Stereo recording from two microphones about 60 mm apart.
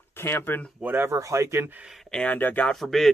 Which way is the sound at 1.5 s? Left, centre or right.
Right.